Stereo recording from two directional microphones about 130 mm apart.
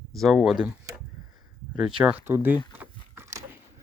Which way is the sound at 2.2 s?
15° right (ahead or behind).